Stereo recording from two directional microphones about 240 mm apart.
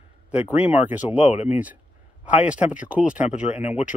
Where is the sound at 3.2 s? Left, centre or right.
Left.